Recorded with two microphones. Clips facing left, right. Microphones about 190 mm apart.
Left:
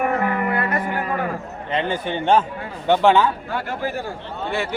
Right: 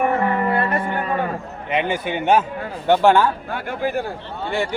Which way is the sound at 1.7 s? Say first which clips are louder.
Right 1 dB; 10° right (ahead or behind).